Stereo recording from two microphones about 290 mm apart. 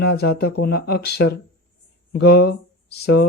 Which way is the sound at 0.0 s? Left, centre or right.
Left.